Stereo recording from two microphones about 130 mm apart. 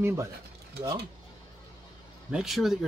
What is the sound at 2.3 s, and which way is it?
Speech, 5° right (ahead or behind).